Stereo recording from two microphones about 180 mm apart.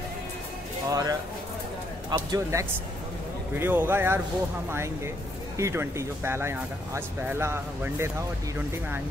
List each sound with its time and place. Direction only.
0.8 s speech: 20° right (ahead or behind)